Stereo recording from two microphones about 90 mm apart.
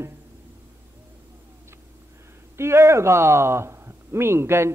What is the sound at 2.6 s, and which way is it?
A man's voice, 30° right (ahead or behind).